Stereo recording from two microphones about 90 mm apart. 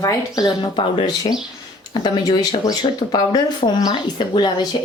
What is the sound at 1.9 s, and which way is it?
A woman's voice, 55° left (ahead or behind).